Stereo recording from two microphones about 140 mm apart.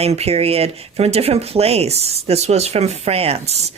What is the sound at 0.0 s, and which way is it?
Speech, 45° right (ahead or behind).